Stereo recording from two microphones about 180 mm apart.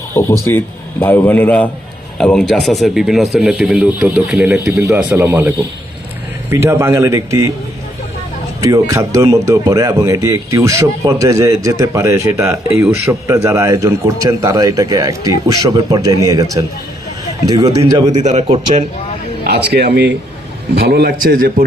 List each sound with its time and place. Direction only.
0.2 s a man's voice: 15° left (ahead or behind); by 7.5 s 15° right (ahead or behind)
8.6 s a man's voice: 20° right (ahead or behind)
18.1 s a man's voice: 40° right (ahead or behind)
19.5 s a man's voice: 65° right (ahead or behind)